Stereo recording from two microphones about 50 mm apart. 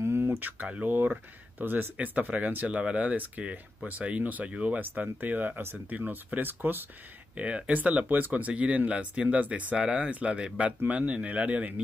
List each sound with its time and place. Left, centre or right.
0.6 s speech: right
0.8 s speech: right
2.0 s speech: right
4.7 s speech: right
7.3 s speech: right
8.1 s speech: right